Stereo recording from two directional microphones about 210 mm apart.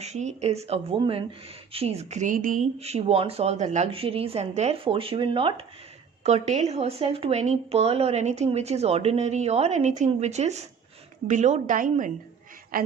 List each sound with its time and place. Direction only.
0.0 s a woman's voice: 35° right (ahead or behind)